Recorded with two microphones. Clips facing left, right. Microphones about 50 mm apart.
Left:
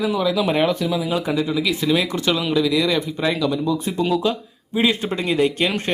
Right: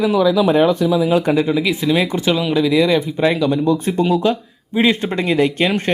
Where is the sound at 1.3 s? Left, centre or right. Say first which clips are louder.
Right 6 dB; right.